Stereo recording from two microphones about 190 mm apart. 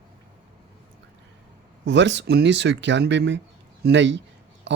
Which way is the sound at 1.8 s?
70° right (ahead or behind).